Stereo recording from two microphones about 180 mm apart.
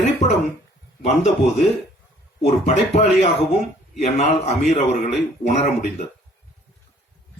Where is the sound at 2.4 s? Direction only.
35° left (ahead or behind).